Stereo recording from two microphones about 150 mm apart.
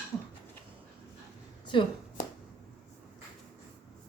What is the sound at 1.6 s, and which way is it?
Shuffling cards, 30° left (ahead or behind).